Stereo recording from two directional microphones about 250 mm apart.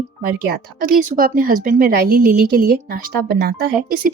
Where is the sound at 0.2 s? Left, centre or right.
Right.